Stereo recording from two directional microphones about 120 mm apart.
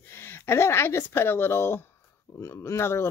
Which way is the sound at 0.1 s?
20° left (ahead or behind).